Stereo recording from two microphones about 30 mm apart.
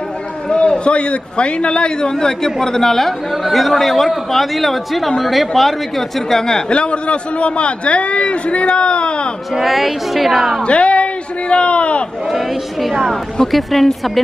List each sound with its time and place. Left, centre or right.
0.5 s a man's voice: left; by 6.4 s centre
6.7 s a man's voice: left
9.5 s speech: centre
10.6 s a sound: left
12.3 s speech: centre
12.9 s speech: centre